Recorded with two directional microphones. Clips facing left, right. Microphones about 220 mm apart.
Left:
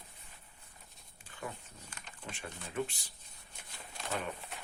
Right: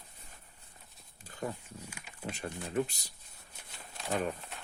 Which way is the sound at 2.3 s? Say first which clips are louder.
Right 7 dB; 40° right (ahead or behind).